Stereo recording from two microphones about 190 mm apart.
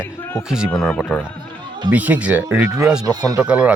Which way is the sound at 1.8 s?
10° right (ahead or behind).